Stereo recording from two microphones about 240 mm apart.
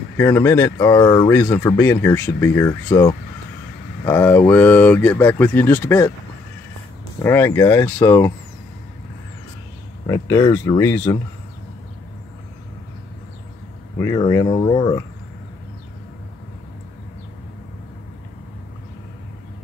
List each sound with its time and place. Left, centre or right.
0.2 s speech: centre
7.2 s speech: centre
10.0 s speech: centre
13.9 s speech: centre